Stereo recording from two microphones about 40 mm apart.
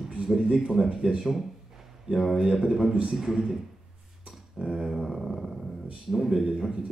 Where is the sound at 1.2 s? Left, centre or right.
Centre.